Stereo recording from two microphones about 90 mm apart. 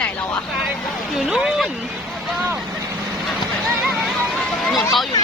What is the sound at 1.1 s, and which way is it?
Speech, 5° right (ahead or behind).